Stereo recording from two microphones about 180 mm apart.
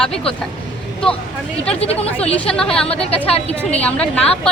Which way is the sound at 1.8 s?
35° left (ahead or behind).